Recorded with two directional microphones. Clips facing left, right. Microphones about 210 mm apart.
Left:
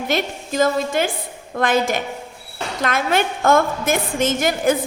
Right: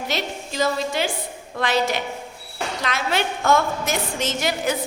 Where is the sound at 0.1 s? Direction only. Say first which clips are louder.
Left 8 dB; 50° left (ahead or behind).